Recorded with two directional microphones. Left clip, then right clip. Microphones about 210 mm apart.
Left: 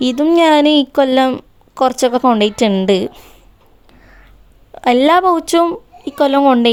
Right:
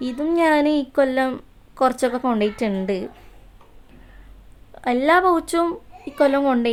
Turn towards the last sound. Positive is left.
turn(degrees=30)  # may be behind; listen again after turning